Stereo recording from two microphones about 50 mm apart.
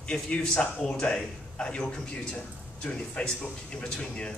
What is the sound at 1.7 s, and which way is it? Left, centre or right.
A man's voice, left.